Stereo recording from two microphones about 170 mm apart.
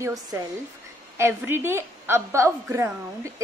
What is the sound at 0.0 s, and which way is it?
Speech, 20° right (ahead or behind).